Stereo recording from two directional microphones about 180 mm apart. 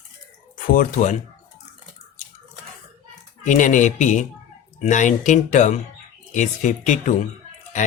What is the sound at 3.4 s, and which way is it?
Speech, 45° left (ahead or behind).